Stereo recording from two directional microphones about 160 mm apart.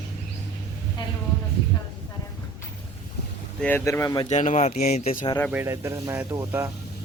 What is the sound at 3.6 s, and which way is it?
Speech, 15° left (ahead or behind).